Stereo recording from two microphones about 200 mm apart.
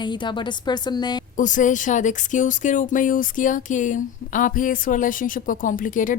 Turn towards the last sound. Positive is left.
turn(degrees=40)  # may be behind; listen again after turning